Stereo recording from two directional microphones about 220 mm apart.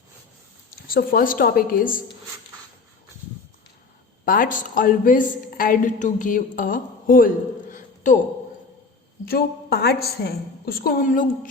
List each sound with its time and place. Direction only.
0.9 s a woman's voice: 40° left (ahead or behind)
4.3 s a woman's voice: 40° left (ahead or behind)
9.2 s a woman's voice: 45° left (ahead or behind)